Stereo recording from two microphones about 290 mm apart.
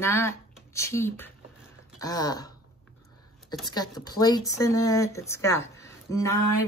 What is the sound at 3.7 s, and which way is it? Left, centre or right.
Speech, centre.